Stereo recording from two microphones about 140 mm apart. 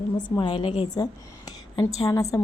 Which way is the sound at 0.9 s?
25° left (ahead or behind).